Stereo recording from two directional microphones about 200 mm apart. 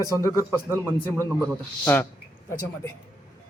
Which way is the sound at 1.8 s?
10° left (ahead or behind).